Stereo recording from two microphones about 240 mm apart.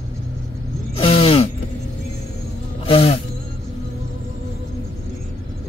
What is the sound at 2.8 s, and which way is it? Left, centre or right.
Insect, left.